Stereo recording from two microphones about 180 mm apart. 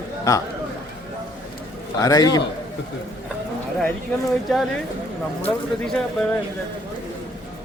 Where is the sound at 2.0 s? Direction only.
20° left (ahead or behind).